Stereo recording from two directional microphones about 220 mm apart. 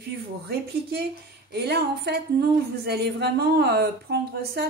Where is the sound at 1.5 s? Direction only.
45° right (ahead or behind).